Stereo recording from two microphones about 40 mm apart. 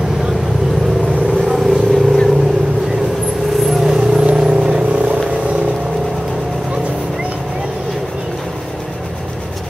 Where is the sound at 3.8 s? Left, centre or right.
Centre.